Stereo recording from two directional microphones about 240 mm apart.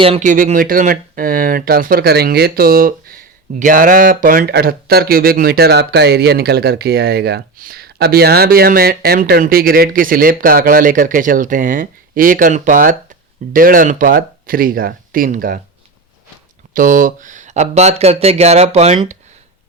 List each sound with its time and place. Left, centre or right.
0.0 s speech: right
16.7 s speech: right